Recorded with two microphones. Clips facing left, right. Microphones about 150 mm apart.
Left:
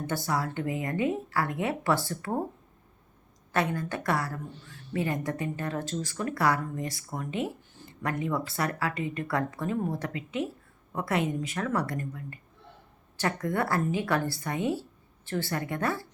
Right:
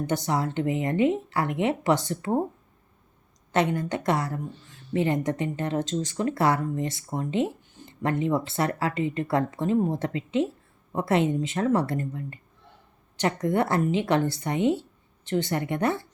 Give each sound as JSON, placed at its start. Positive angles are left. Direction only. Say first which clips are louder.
{"t": 0.1, "sound": "speech", "louder": "right 2 dB", "side_deg": -20}
{"t": 3.5, "sound": "speech", "louder": "right 4 dB", "side_deg": -20}